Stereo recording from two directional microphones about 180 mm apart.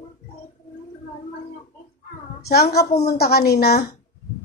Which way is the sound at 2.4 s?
60° left (ahead or behind).